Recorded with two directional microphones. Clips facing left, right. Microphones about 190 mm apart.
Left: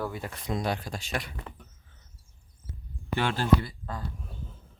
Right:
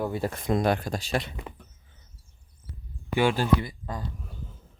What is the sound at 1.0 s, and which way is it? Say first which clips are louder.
Speech: right 5 dB; 30° right (ahead or behind).